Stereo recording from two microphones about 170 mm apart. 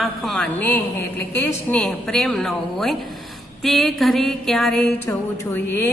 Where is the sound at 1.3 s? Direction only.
5° left (ahead or behind).